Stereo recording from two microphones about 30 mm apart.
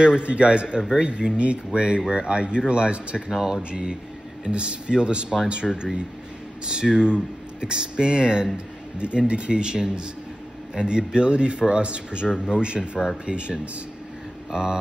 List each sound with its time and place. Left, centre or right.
0.2 s speech: right
3.3 s speech: centre
4.5 s speech: right
14.5 s speech: right